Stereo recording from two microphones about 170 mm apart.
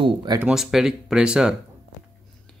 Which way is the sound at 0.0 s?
25° right (ahead or behind).